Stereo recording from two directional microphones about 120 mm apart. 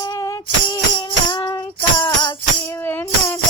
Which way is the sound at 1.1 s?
40° left (ahead or behind).